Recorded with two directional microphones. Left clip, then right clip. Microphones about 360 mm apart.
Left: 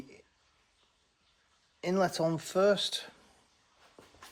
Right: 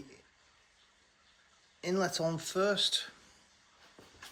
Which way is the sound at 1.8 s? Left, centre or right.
Centre.